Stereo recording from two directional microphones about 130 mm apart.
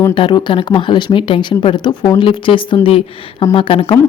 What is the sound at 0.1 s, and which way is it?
Speech, 40° left (ahead or behind).